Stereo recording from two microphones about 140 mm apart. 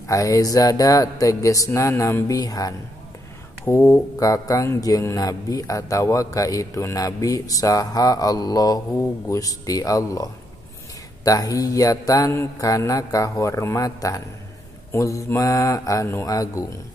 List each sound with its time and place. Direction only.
0.0 s mantra: 25° left (ahead or behind)